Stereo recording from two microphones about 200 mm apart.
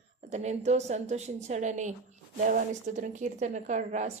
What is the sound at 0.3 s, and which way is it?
A woman's voice, 35° right (ahead or behind).